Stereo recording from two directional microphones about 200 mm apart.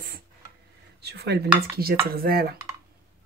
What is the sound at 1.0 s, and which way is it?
Cutlery, 55° right (ahead or behind).